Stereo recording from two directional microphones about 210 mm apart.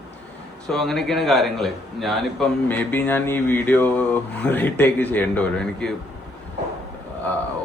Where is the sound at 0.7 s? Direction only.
Centre (ahead or behind).